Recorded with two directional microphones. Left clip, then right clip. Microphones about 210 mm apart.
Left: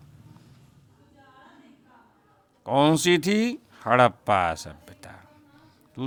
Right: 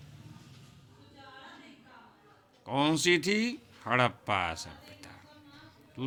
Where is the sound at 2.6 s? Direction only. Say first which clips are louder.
Left 7 dB; 50° left (ahead or behind).